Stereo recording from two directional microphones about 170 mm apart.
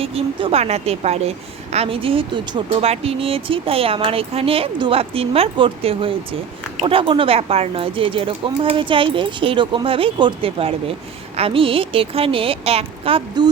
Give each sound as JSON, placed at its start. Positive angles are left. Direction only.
{"t": 0.0, "sound": "speech", "side_deg": -35}